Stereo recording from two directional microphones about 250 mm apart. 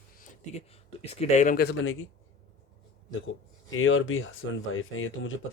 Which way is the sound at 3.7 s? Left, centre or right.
Left.